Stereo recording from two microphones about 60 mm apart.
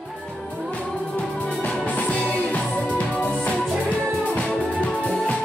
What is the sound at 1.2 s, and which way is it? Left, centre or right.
Music, centre.